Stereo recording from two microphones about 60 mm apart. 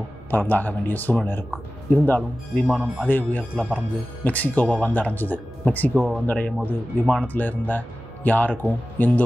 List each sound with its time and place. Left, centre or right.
0.3 s speech: left